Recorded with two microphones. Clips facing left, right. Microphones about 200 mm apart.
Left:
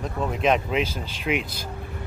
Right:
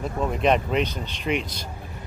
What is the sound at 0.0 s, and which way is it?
Speech, centre (ahead or behind).